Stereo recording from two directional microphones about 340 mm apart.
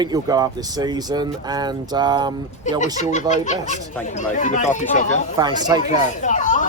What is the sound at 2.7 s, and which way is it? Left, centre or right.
Speech, left.